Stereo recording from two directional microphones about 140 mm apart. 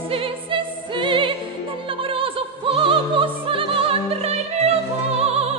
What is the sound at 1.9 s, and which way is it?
Opera, 40° right (ahead or behind).